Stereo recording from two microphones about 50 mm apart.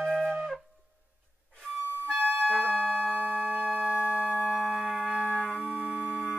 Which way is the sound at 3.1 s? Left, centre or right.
Right.